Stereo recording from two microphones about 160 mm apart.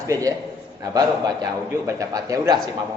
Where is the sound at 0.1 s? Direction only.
20° right (ahead or behind).